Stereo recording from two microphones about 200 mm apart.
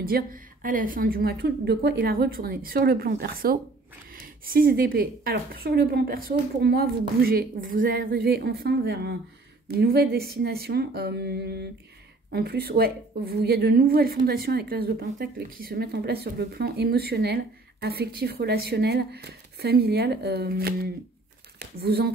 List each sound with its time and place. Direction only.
0.0 s a woman's voice: 45° right (ahead or behind)